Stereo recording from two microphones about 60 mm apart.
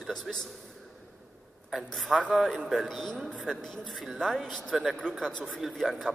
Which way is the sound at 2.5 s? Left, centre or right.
Centre.